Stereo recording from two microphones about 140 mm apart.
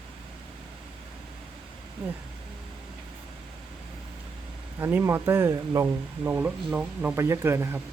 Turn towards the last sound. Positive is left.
turn(degrees=-15)  # may be behind; listen again after turning